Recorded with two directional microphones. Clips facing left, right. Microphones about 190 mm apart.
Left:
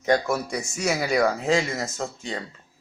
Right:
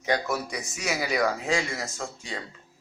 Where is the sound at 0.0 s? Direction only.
50° left (ahead or behind).